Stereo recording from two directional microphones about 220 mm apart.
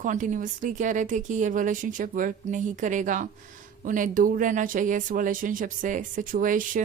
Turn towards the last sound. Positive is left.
turn(degrees=-40)  # may be behind; listen again after turning